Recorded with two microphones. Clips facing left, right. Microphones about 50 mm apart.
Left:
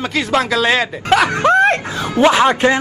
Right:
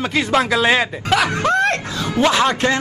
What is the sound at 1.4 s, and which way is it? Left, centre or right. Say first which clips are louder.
A man's voice: left 5 dB; left.